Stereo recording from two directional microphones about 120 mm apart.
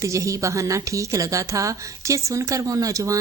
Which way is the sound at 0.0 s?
25° right (ahead or behind).